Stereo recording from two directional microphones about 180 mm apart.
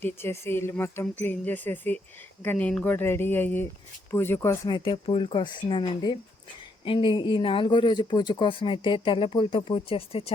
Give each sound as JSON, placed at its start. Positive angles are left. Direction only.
{"t": 0.0, "sound": "speech", "side_deg": 15}